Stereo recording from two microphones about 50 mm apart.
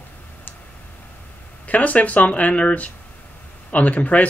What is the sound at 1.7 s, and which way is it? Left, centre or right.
Speech, left.